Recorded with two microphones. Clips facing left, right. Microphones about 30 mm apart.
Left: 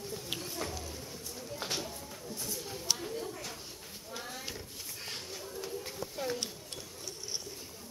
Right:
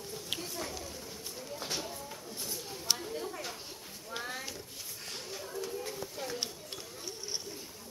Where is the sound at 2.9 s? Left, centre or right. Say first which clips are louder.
Right 1 dB; centre.